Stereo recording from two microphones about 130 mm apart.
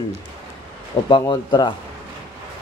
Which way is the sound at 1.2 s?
35° left (ahead or behind).